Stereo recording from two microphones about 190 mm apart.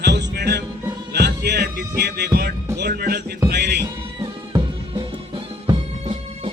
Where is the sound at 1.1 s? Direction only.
60° right (ahead or behind).